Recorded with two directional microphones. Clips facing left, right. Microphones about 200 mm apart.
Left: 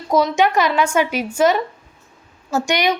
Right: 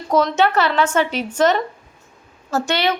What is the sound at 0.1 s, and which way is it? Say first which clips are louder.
A woman's voice: even; 10° left (ahead or behind).